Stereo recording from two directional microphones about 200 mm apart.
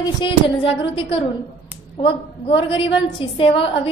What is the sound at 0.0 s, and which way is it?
A woman's voice, 25° left (ahead or behind).